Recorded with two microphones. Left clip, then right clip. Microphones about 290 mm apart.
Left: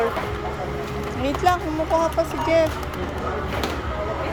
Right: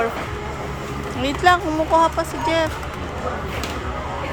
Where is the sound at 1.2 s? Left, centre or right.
Centre.